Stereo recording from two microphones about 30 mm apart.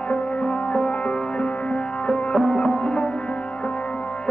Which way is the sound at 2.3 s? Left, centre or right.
Left.